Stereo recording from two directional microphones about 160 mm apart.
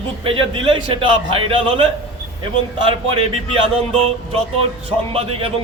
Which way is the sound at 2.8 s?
35° right (ahead or behind).